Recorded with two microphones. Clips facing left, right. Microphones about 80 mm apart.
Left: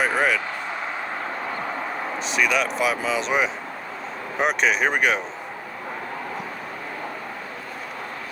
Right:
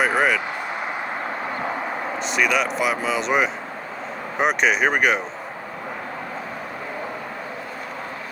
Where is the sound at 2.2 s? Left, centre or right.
Centre.